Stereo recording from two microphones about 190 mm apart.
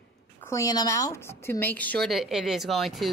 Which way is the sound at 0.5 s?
20° left (ahead or behind).